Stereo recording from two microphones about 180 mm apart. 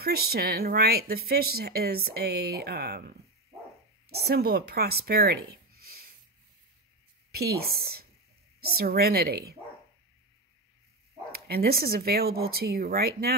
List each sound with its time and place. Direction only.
0.0 s speech: 60° right (ahead or behind)
7.3 s speech: 60° right (ahead or behind)
11.3 s speech: 55° right (ahead or behind)